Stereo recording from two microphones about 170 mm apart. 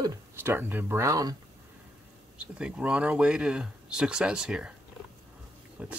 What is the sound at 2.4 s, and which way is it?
Speech, 5° right (ahead or behind).